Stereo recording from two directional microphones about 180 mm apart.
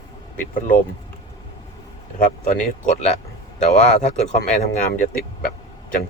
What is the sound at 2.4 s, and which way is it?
Speech, 45° left (ahead or behind).